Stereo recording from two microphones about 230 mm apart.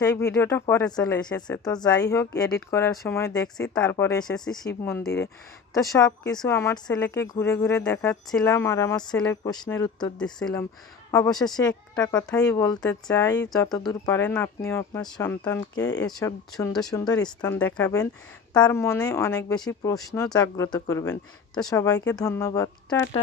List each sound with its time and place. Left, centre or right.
0.0 s speech: centre
3.2 s speech: centre